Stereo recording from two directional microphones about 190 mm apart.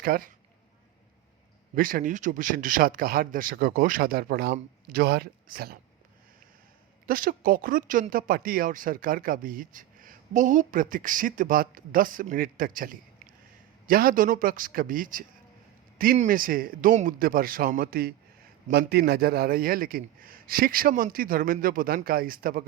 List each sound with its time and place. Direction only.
0.0 s a man's voice: 50° right (ahead or behind)
1.7 s a man's voice: 45° right (ahead or behind)
7.1 s a man's voice: 50° right (ahead or behind)